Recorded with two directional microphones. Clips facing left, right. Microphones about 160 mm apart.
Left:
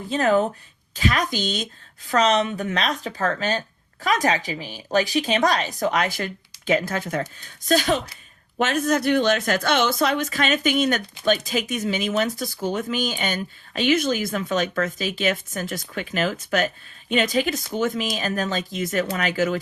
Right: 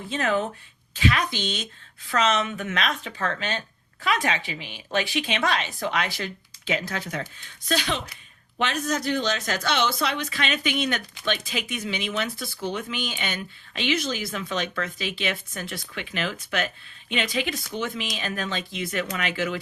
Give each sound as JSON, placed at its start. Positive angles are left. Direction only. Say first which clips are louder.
{"t": 0.1, "sound": "a woman's voice", "louder": "left 6 dB", "side_deg": 40}